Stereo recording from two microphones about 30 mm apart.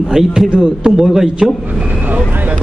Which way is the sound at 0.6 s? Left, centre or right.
Right.